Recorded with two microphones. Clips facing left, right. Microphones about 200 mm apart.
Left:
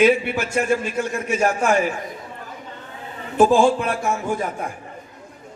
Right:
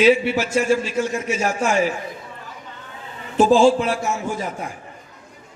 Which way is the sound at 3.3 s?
55° left (ahead or behind).